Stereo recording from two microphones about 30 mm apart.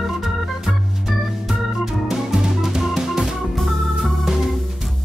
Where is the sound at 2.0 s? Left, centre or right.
Centre.